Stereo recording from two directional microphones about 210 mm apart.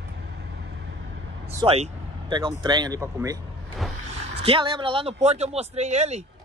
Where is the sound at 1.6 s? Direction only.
25° right (ahead or behind).